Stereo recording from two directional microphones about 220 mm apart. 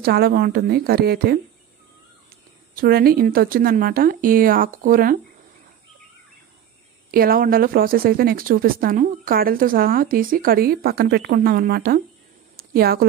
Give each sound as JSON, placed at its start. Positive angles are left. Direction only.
{"t": 0.0, "sound": "a woman's voice", "side_deg": -45}
{"t": 2.7, "sound": "speech", "side_deg": -45}
{"t": 7.1, "sound": "speech", "side_deg": -40}
{"t": 12.5, "sound": "a sound", "side_deg": -45}